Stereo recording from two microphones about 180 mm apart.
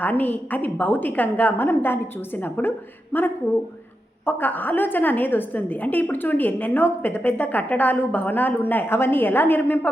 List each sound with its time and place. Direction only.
0.0 s a woman's voice: 10° left (ahead or behind)